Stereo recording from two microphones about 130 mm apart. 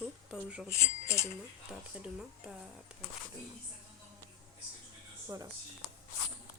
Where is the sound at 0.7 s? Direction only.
20° left (ahead or behind).